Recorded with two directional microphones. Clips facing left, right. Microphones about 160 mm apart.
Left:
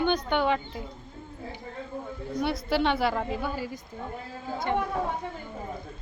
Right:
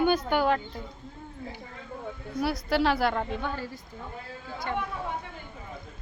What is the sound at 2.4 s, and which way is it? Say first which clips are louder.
A woman's voice: even; centre (ahead or behind).